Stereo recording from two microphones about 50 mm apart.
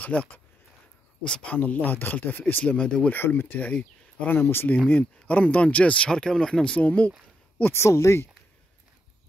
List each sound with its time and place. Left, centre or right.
0.0 s speech: left
2.6 s speech: centre
3.1 s speech: left
3.5 s speech: left
4.3 s speech: left
4.8 s speech: left
6.8 s speech: left
7.7 s speech: left